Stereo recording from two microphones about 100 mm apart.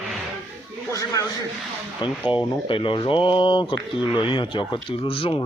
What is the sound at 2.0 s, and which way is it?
Speech, 55° left (ahead or behind).